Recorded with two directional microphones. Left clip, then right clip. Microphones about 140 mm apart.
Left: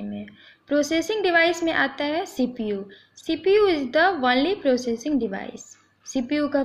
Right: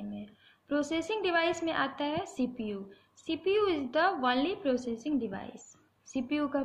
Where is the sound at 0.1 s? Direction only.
35° left (ahead or behind).